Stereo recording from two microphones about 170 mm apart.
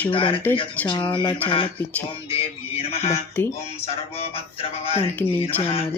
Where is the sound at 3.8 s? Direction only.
35° left (ahead or behind).